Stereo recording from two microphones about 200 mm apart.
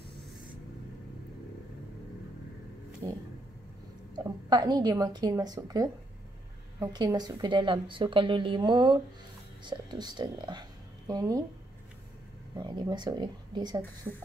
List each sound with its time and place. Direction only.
3.0 s a woman's voice: 20° right (ahead or behind)
4.2 s a woman's voice: 20° right (ahead or behind)
12.5 s a woman's voice: 20° right (ahead or behind)
14.0 s music: 10° right (ahead or behind)